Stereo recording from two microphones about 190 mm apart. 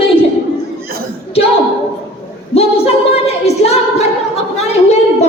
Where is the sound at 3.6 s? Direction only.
35° left (ahead or behind).